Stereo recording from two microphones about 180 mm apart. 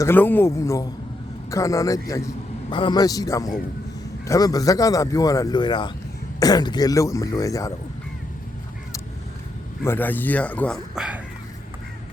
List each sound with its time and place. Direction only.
0.0 s speech: 10° left (ahead or behind)
9.8 s speech: 10° left (ahead or behind)
10.9 s speech: 5° right (ahead or behind)